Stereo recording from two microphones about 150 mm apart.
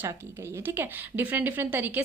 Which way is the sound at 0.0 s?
15° right (ahead or behind).